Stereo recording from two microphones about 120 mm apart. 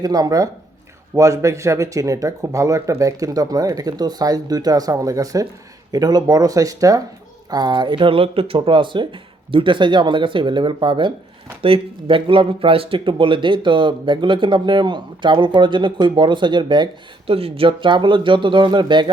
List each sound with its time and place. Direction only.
0.0 s speech: 30° right (ahead or behind)